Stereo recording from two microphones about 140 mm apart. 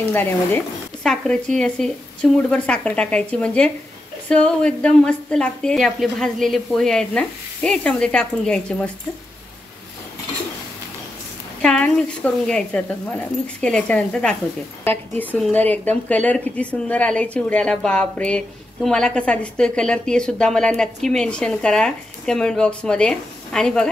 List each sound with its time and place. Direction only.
0.1 s a woman's voice: 15° left (ahead or behind)
1.0 s a woman's voice: 5° left (ahead or behind)
11.6 s a woman's voice: 5° left (ahead or behind)